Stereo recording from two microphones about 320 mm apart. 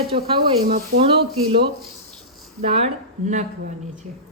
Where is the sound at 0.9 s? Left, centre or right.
Right.